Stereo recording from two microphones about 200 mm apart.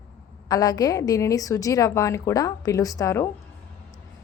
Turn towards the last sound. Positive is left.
turn(degrees=15)  # may be behind; listen again after turning